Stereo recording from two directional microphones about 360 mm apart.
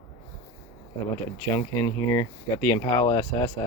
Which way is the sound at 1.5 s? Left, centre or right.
Centre.